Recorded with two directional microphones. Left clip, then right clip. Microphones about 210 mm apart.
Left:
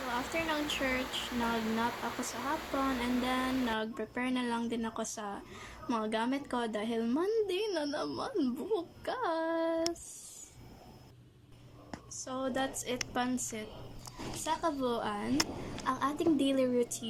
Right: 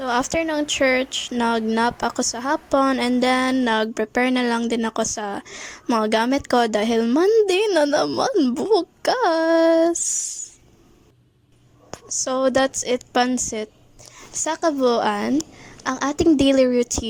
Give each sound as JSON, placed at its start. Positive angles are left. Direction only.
{"t": 0.1, "sound": "speech", "side_deg": -45}
{"t": 12.0, "sound": "speech", "side_deg": -35}